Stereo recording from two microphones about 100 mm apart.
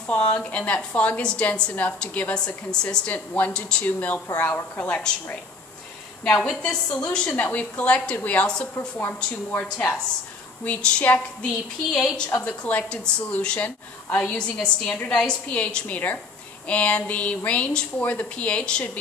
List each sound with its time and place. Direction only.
0.0 s a woman's voice: 10° left (ahead or behind)
8.7 s a woman's voice: 20° left (ahead or behind); by 12.3 s 5° left (ahead or behind)
12.4 s a woman's voice: 15° left (ahead or behind)